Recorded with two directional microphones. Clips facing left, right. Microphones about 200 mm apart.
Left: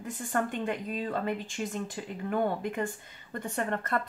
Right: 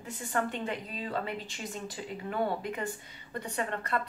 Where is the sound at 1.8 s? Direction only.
50° left (ahead or behind).